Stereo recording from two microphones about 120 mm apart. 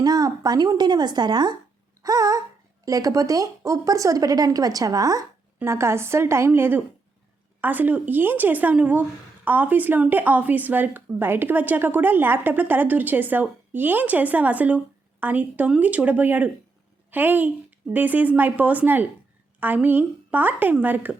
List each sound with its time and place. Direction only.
0.0 s speech: 30° right (ahead or behind)
2.0 s a sound: 30° right (ahead or behind)
2.8 s a woman's voice: 30° right (ahead or behind)